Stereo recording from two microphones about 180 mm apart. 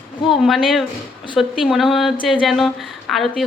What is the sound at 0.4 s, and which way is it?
A woman's voice, centre (ahead or behind).